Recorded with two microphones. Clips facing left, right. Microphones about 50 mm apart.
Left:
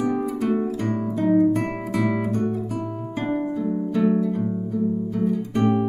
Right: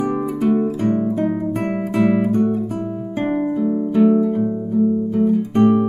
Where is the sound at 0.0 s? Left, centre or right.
Right.